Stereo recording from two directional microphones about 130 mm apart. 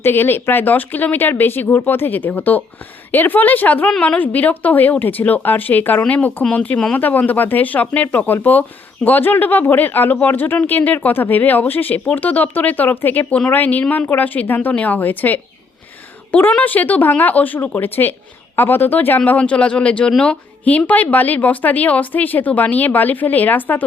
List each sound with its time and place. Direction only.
0.0 s a woman's voice: 15° left (ahead or behind)